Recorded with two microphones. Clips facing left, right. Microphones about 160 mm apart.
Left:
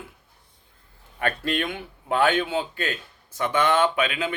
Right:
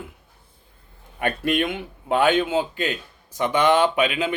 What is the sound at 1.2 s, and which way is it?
Speech, 15° right (ahead or behind).